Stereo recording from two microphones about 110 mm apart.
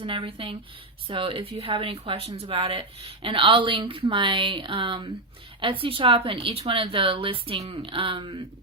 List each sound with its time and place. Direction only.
0.0 s speech: 50° right (ahead or behind)